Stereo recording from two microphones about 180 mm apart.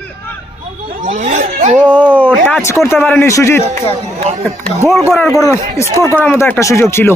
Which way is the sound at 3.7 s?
35° right (ahead or behind).